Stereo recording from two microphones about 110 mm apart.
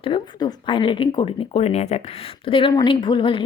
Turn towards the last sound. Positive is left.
turn(degrees=50)  # may be behind; listen again after turning